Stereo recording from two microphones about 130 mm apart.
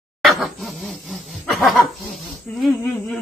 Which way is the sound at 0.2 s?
Centre (ahead or behind).